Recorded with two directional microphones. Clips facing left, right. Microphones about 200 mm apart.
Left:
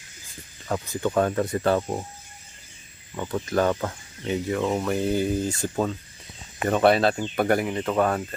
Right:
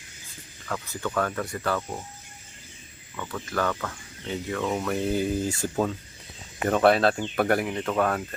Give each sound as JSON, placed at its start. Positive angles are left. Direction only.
{"t": 0.6, "sound": "speech", "side_deg": 20}
{"t": 3.2, "sound": "speech", "side_deg": 25}
{"t": 4.3, "sound": "speech", "side_deg": 15}